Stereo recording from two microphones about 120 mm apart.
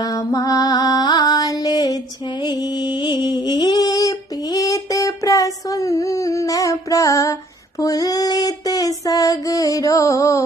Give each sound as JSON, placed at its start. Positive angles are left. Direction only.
{"t": 0.0, "sound": "mantra", "side_deg": 30}
{"t": 2.4, "sound": "a sound", "side_deg": 35}
{"t": 7.8, "sound": "child singing", "side_deg": 30}